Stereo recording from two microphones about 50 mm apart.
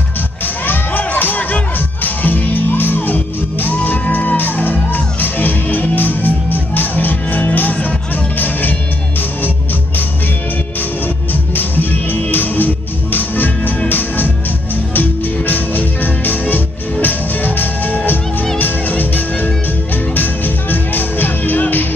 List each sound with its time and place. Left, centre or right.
0.7 s music: left
11.5 s music: left